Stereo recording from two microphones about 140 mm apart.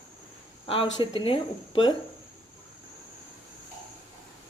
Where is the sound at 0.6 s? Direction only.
40° left (ahead or behind).